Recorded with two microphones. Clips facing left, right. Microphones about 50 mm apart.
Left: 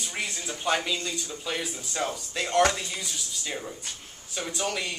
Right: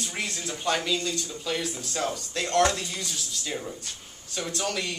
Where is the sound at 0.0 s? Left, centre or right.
Centre.